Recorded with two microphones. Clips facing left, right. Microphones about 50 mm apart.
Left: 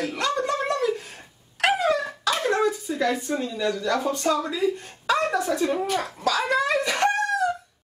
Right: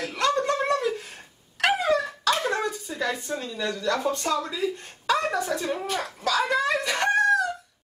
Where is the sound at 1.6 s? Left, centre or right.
Centre.